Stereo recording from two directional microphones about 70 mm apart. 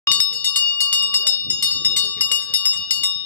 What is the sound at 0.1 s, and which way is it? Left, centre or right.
Bicycle bell, left.